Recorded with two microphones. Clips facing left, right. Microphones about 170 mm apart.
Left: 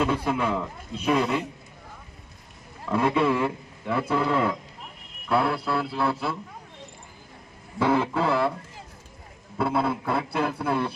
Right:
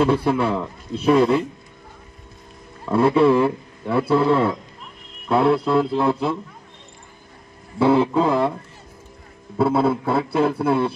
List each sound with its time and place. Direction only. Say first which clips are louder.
0.0 s speech: right 6 dB; 35° right (ahead or behind)
2.9 s speech: right 7 dB; 35° right (ahead or behind)
7.8 s speech: right 6 dB; 20° right (ahead or behind)
9.6 s speech: right 7 dB; 30° right (ahead or behind)